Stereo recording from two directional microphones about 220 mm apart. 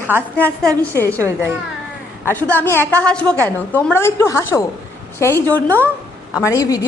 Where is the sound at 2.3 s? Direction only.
10° left (ahead or behind).